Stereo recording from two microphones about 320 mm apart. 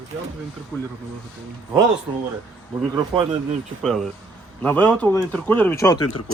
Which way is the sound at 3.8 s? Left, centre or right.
Centre.